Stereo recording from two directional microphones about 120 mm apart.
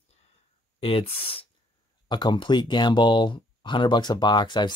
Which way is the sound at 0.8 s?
50° left (ahead or behind).